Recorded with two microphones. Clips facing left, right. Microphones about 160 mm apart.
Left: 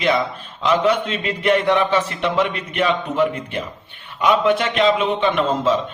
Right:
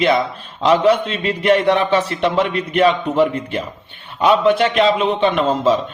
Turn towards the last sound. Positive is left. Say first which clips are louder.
# right 3 dB
turn(degrees=-35)  # may be behind; listen again after turning